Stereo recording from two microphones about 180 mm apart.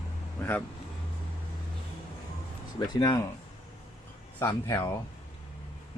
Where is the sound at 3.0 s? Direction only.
20° left (ahead or behind).